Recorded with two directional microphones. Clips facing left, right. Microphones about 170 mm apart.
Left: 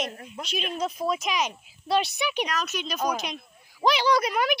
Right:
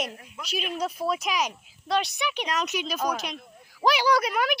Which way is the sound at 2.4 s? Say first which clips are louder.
Right 1 dB; 20° right (ahead or behind).